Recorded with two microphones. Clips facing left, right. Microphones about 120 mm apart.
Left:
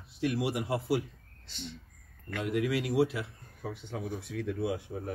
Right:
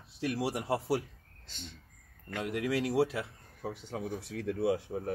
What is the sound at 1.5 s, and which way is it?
Speech, 45° right (ahead or behind).